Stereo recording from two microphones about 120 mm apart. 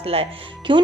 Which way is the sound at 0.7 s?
45° right (ahead or behind).